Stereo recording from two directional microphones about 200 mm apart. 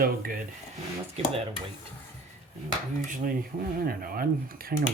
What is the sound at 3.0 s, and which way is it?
Speech, 40° right (ahead or behind).